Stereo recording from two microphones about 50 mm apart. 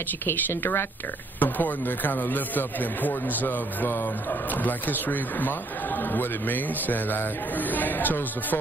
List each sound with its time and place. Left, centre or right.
0.3 s speech: left
1.4 s speech: left